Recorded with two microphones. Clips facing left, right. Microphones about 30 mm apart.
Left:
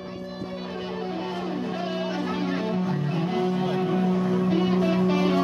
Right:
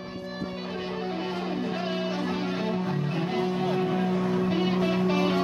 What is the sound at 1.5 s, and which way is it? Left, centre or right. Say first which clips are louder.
Music: left 1 dB; centre.